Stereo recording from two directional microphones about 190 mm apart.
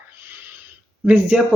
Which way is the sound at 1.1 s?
5° right (ahead or behind).